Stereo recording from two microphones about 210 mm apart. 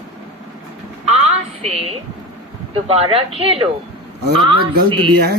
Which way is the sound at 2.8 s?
30° right (ahead or behind).